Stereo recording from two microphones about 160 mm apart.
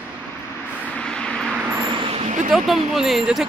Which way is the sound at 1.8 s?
35° right (ahead or behind).